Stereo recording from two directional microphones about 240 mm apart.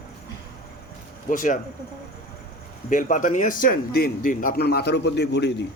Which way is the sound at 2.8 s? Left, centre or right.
Left.